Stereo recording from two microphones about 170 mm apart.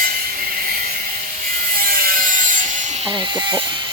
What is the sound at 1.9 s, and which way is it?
Wood, 55° right (ahead or behind).